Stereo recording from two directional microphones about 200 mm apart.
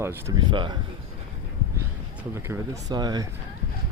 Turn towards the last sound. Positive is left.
turn(degrees=-20)  # may be behind; listen again after turning